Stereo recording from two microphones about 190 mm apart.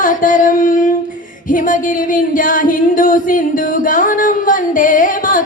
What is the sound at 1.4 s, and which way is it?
Singing, 45° left (ahead or behind).